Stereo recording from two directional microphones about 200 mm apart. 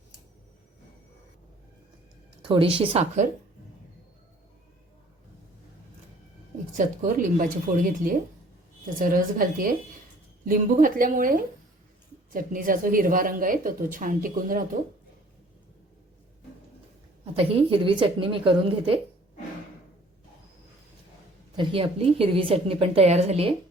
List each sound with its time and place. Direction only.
2.4 s a woman's voice: 25° right (ahead or behind)
6.7 s speech: 40° right (ahead or behind)
17.3 s a woman's voice: 25° right (ahead or behind)
21.5 s a woman's voice: 25° right (ahead or behind)